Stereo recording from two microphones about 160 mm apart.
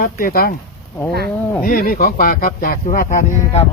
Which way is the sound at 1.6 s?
65° left (ahead or behind).